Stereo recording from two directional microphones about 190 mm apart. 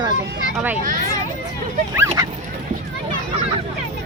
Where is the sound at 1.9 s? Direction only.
15° right (ahead or behind).